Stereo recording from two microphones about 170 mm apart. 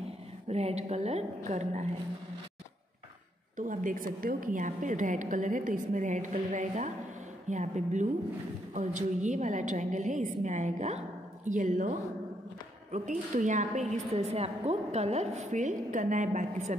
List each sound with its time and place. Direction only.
0.5 s a woman's voice: 40° right (ahead or behind)
3.5 s a woman's voice: 50° right (ahead or behind)